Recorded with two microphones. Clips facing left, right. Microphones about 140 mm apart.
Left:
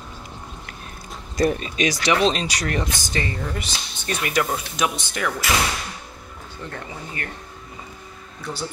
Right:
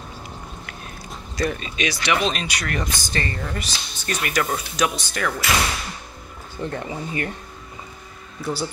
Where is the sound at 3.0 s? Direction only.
15° left (ahead or behind).